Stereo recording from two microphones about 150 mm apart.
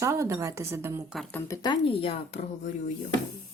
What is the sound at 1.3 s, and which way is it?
Speech, 15° left (ahead or behind).